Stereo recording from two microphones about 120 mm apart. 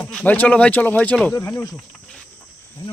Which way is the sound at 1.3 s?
25° left (ahead or behind).